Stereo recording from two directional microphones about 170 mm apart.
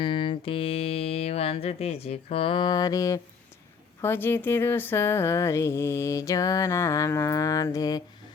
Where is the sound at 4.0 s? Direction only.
10° left (ahead or behind).